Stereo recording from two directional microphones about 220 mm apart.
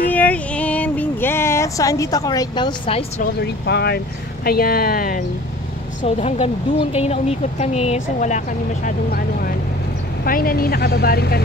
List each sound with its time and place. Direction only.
0.1 s a sound: 5° left (ahead or behind); by 3.3 s 25° left (ahead or behind)
3.6 s speech: 50° left (ahead or behind)
6.0 s speech: 30° left (ahead or behind)
8.8 s speech: 45° left (ahead or behind)